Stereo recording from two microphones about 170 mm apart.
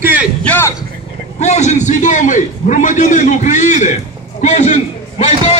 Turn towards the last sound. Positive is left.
turn(degrees=35)  # may be behind; listen again after turning